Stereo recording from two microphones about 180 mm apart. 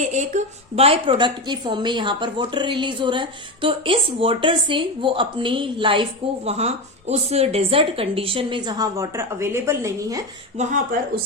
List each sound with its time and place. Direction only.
0.0 s a woman's voice: 40° right (ahead or behind); by 10.2 s 20° right (ahead or behind)
10.6 s speech: 45° right (ahead or behind)